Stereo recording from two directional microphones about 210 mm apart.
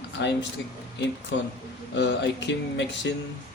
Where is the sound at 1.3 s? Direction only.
60° left (ahead or behind).